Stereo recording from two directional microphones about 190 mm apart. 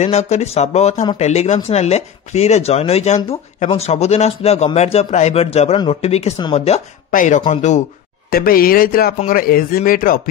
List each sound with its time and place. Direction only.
0.0 s a man's voice: 35° left (ahead or behind)
7.1 s a man's voice: 40° left (ahead or behind)
8.3 s a man's voice: 50° left (ahead or behind)